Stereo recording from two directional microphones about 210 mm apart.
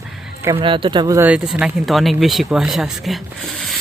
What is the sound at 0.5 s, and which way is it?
Speech, 25° right (ahead or behind).